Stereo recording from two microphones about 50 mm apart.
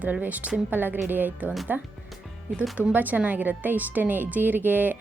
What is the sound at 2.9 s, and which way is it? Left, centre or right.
A woman's voice, right.